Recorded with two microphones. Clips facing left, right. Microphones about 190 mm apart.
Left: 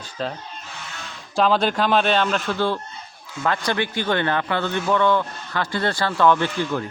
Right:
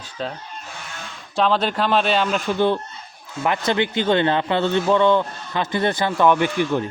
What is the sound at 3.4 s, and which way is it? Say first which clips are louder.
A man's voice: right 2 dB; 20° right (ahead or behind).